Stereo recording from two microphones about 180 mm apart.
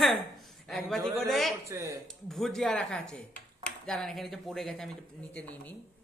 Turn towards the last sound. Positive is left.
turn(degrees=10)  # may be behind; listen again after turning